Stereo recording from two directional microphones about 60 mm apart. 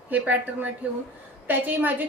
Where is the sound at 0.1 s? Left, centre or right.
Right.